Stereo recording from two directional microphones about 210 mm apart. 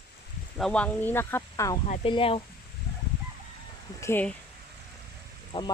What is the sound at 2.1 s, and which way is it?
Speech, 25° left (ahead or behind).